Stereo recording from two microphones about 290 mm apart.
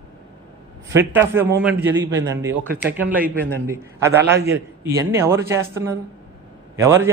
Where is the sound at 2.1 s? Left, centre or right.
Right.